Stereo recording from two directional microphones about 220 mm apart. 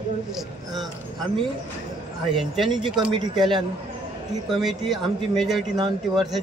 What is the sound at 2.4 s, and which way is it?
Speech, centre (ahead or behind).